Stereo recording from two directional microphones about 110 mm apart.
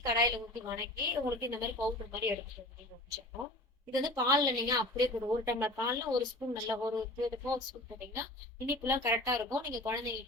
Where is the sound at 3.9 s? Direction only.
35° right (ahead or behind).